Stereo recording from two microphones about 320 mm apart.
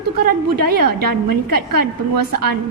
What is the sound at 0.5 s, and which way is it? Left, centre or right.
A woman's voice, right.